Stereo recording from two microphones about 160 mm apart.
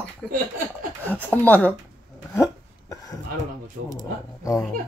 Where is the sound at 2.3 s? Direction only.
20° left (ahead or behind).